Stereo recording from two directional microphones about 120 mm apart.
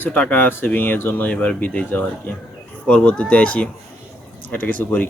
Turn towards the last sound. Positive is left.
turn(degrees=15)  # may be behind; listen again after turning